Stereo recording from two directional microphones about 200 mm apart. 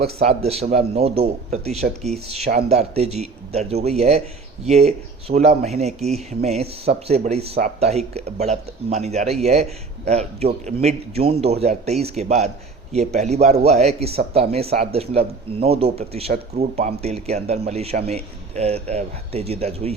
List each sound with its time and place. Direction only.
0.2 s speech: 30° right (ahead or behind)